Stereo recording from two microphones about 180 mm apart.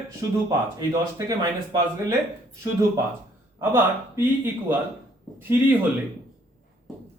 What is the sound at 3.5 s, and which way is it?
Speech, 10° right (ahead or behind).